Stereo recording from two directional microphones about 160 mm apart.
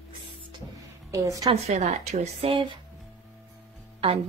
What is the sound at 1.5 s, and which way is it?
A woman's voice, 45° right (ahead or behind).